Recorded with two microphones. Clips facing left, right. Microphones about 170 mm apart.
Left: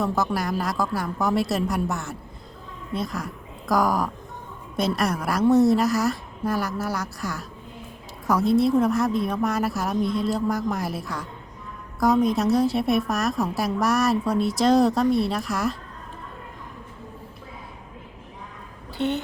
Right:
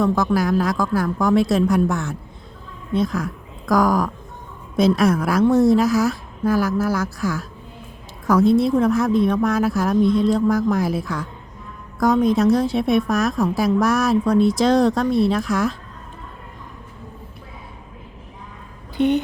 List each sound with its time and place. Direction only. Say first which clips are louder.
0.0 s a woman's voice: right 6 dB; centre (ahead or behind)
18.9 s speech: right 7 dB; 15° right (ahead or behind)